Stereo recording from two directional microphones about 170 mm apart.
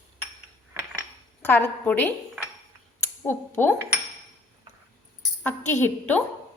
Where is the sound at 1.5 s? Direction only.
10° left (ahead or behind).